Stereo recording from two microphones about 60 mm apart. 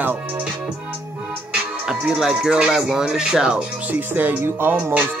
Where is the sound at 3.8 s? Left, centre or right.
Right.